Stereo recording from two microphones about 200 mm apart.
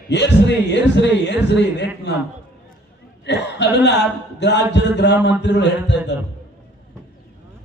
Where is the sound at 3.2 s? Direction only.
60° left (ahead or behind).